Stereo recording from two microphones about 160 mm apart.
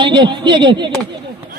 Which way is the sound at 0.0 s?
30° right (ahead or behind).